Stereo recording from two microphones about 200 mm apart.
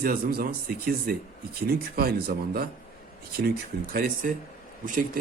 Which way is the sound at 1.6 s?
50° right (ahead or behind).